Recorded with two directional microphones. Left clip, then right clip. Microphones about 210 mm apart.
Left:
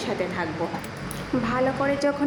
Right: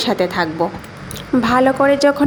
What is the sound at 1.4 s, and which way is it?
Speech, 45° right (ahead or behind).